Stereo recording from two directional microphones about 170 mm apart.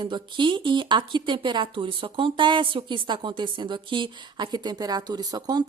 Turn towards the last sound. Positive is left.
turn(degrees=-25)  # may be behind; listen again after turning